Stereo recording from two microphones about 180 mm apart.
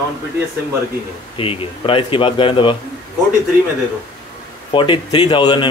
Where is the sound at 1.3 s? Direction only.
30° left (ahead or behind).